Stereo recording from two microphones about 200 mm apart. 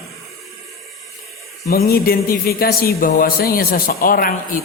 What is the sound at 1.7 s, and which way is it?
A man's voice, 50° left (ahead or behind).